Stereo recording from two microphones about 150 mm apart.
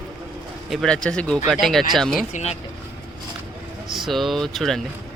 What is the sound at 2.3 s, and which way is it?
Speech, 45° left (ahead or behind).